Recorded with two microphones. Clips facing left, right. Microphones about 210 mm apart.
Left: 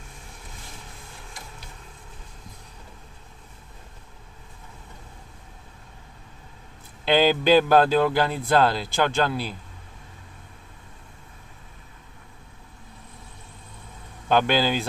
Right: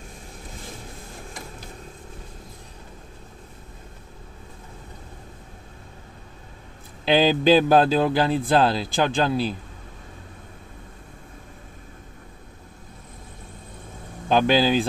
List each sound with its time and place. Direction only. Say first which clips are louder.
7.1 s a man's voice: right 1 dB; 20° right (ahead or behind)
14.3 s speech: right 3 dB; 15° right (ahead or behind)